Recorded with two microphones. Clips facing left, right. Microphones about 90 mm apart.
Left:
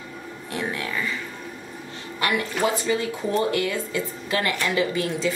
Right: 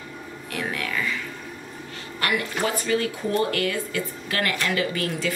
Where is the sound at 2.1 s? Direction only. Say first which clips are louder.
Left 1 dB; 20° left (ahead or behind).